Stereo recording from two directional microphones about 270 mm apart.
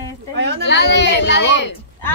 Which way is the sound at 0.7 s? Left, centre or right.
Left.